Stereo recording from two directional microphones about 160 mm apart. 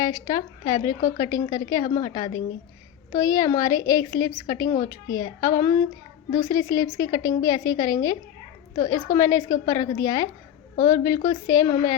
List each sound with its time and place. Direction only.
0.0 s a woman's voice: 20° left (ahead or behind)